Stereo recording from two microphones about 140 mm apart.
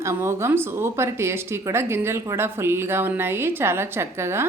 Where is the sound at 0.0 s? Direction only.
20° right (ahead or behind).